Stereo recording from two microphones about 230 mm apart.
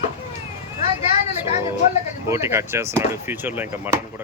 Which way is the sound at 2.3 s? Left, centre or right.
Centre.